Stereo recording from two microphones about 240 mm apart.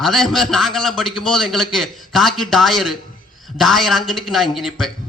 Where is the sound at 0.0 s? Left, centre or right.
Centre.